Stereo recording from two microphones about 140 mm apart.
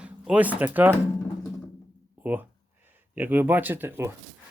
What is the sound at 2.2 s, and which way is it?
Speech, 15° right (ahead or behind).